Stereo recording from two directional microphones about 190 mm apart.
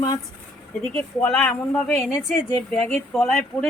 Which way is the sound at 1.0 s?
5° left (ahead or behind).